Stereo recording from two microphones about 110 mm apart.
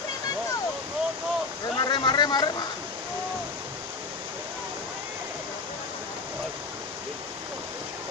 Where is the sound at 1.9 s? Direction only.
45° left (ahead or behind).